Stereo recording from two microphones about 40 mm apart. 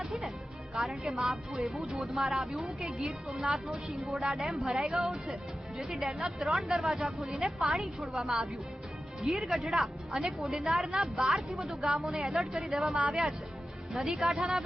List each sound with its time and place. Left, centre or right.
0.0 s music: centre
0.7 s a woman's voice: centre
1.1 s speech: centre
7.0 s speech: centre
7.6 s speech: centre